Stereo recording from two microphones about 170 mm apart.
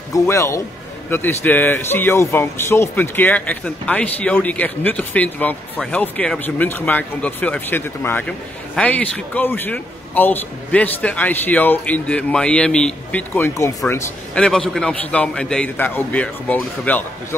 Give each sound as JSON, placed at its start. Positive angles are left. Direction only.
{"t": 0.1, "sound": "a man's voice", "side_deg": 20}